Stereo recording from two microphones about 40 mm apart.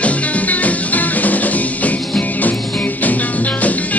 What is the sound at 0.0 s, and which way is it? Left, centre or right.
Music, left.